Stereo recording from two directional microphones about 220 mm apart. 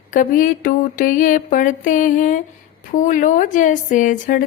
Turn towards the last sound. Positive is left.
turn(degrees=35)  # may be behind; listen again after turning